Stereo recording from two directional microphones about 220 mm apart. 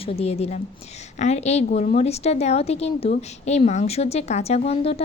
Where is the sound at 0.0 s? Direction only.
25° left (ahead or behind).